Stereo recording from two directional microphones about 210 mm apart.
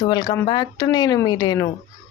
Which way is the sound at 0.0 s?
20° left (ahead or behind).